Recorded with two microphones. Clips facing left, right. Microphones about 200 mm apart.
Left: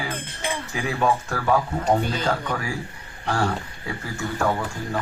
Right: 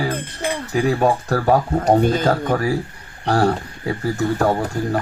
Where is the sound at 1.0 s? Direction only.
40° right (ahead or behind).